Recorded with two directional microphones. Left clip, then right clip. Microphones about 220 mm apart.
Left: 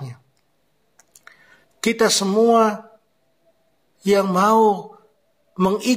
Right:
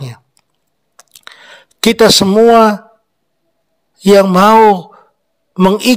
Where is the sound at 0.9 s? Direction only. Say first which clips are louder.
Right 12 dB; 45° right (ahead or behind).